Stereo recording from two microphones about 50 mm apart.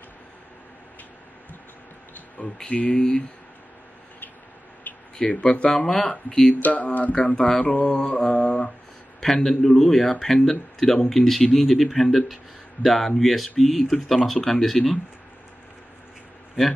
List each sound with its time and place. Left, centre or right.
2.4 s mantra: left
4.9 s a sound: left
5.2 s mantra: left
6.2 s speech: centre
6.5 s mantra: left
9.2 s speech: centre